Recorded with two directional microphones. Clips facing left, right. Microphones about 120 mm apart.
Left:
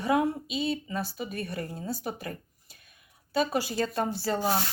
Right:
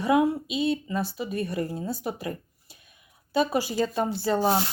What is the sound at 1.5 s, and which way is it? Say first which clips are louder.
Speech: right 6 dB; 15° right (ahead or behind).